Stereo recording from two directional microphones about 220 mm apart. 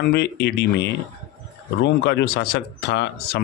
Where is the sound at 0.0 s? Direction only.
50° left (ahead or behind).